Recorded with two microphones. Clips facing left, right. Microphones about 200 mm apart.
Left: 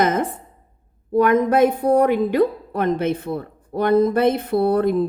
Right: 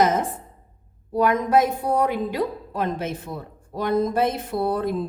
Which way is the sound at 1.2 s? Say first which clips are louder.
Left 4 dB; 60° left (ahead or behind).